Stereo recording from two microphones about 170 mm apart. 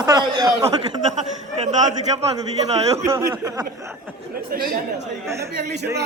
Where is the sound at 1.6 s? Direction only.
40° right (ahead or behind).